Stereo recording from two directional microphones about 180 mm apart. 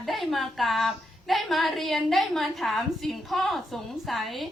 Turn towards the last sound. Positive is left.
turn(degrees=0)  # may be behind; listen again after turning